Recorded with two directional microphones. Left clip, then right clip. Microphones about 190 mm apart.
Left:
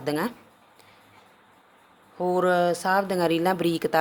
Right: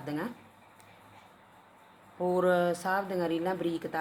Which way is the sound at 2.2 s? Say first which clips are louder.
Left 5 dB; 35° left (ahead or behind).